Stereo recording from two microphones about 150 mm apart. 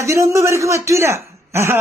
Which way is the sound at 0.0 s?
20° right (ahead or behind).